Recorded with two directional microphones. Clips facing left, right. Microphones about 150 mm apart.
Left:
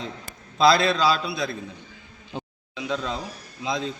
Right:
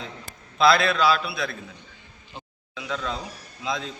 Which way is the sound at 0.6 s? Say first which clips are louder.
Left 1 dB; 25° left (ahead or behind).